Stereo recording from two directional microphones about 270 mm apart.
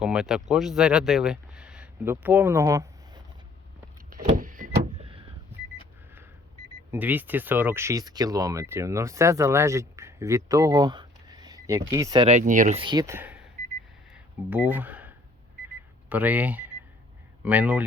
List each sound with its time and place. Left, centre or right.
0.0 s speech: centre
4.1 s vehicle: right
6.9 s speech: centre
14.1 s a sound: centre
16.0 s speech: centre